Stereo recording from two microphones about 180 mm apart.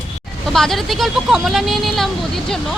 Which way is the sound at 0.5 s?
Centre (ahead or behind).